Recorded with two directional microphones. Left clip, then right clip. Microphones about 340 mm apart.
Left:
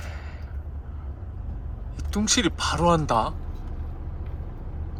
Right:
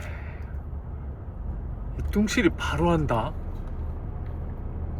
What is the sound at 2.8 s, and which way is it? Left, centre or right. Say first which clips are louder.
Speech: left 4 dB; centre.